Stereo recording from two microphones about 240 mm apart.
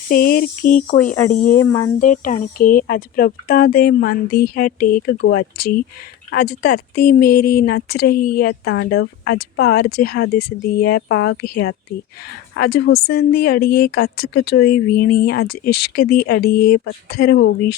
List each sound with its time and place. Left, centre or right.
0.1 s speech: left
1.1 s speech: centre
2.0 s speech: left
17.3 s speech: left